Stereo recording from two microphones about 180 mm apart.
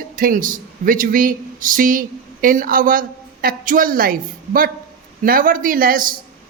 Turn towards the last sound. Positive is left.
turn(degrees=-50)  # may be behind; listen again after turning